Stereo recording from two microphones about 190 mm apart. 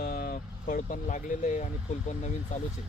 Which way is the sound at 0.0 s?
55° left (ahead or behind).